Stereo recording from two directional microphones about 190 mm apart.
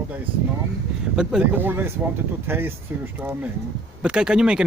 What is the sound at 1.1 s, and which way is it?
Speech, 5° right (ahead or behind).